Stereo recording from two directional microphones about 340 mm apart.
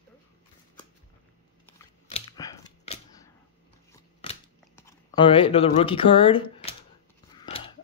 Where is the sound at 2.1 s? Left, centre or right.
Centre.